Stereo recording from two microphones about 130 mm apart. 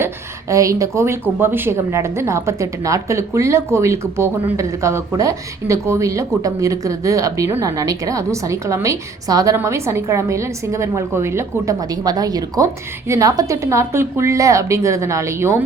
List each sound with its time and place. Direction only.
0.0 s speech: 25° right (ahead or behind)